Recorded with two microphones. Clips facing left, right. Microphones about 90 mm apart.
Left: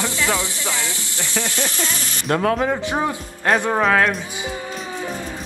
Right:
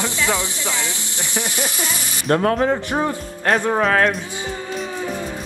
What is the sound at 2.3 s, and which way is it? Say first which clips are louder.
Speech: right 3 dB; 35° right (ahead or behind).